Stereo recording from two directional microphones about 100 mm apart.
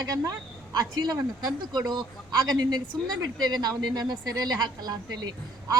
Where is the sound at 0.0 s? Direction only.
40° right (ahead or behind).